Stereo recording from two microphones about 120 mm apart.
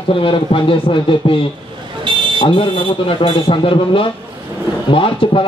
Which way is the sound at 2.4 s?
45° left (ahead or behind).